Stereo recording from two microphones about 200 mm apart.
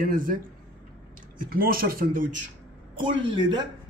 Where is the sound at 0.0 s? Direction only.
45° right (ahead or behind).